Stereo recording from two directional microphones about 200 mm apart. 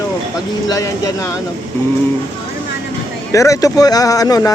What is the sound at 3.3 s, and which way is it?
Speech, 15° left (ahead or behind).